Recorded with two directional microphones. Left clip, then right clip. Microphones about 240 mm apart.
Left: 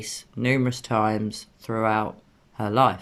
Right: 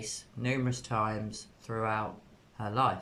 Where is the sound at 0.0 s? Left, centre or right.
Left.